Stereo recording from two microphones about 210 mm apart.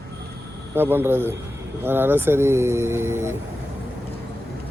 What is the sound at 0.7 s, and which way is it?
Speech, 10° right (ahead or behind).